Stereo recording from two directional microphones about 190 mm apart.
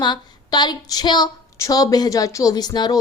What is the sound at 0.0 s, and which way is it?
A woman's voice, 25° left (ahead or behind).